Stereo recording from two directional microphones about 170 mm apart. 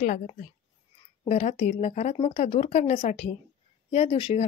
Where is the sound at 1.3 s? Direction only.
40° left (ahead or behind).